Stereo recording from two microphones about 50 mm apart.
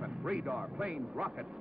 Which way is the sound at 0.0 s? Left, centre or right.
Centre.